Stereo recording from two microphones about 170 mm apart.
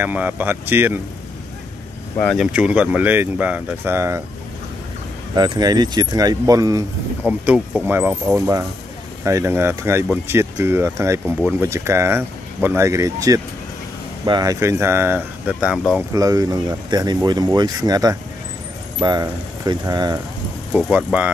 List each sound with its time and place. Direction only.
0.0 s speech: 10° right (ahead or behind)
2.3 s speech: 5° right (ahead or behind)
5.3 s speech: 25° right (ahead or behind)
7.2 s speech: 5° right (ahead or behind)
16.1 s speech: 20° right (ahead or behind)
20.7 s speech: 10° right (ahead or behind)